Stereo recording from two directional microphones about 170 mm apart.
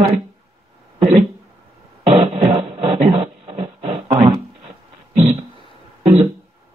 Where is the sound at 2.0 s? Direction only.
35° right (ahead or behind).